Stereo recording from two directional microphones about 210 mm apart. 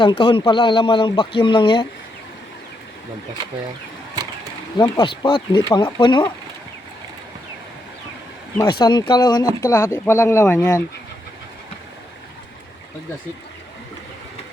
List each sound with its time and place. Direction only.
0.0 s speech: 20° left (ahead or behind)
4.8 s speech: 20° left (ahead or behind)
8.8 s speech: 20° left (ahead or behind)